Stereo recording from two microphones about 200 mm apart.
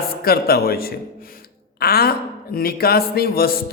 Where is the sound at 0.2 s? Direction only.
50° left (ahead or behind).